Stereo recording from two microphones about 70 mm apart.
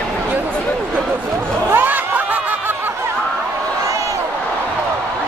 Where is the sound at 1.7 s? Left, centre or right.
Right.